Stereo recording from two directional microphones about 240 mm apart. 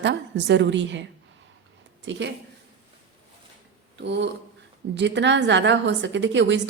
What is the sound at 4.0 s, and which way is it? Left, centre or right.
A woman's voice, right.